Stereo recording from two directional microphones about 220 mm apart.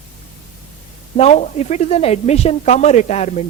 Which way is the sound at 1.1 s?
30° left (ahead or behind).